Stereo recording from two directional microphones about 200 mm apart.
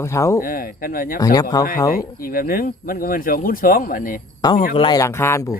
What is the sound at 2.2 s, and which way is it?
Speech, 45° left (ahead or behind).